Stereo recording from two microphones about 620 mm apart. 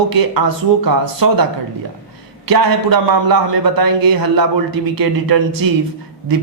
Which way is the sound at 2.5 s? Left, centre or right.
Right.